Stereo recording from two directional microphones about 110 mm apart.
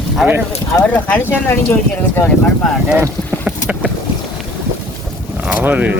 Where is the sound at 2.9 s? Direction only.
10° right (ahead or behind).